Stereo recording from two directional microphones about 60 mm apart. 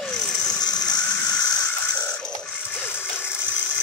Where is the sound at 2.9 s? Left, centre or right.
Left.